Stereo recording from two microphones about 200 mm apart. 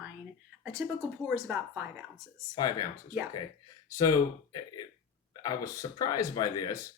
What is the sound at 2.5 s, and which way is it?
Speech, 20° left (ahead or behind).